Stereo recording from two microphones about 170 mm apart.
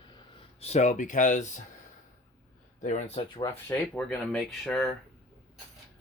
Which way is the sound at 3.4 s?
15° left (ahead or behind).